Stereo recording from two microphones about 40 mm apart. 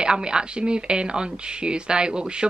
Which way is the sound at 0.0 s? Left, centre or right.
Right.